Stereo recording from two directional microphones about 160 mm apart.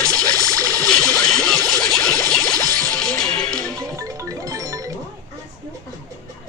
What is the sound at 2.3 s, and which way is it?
Music, 5° left (ahead or behind).